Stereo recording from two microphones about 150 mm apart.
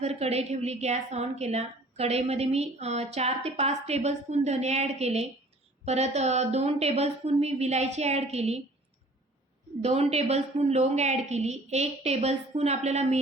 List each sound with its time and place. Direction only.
0.0 s a woman's voice: 45° right (ahead or behind)
9.8 s a woman's voice: 45° right (ahead or behind)